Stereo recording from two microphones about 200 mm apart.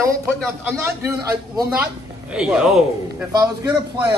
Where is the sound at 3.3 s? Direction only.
15° right (ahead or behind).